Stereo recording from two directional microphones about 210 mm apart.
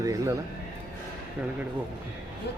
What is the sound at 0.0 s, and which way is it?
Speech, 15° right (ahead or behind).